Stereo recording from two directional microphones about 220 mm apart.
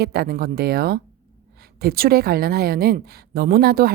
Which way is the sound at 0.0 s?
45° right (ahead or behind).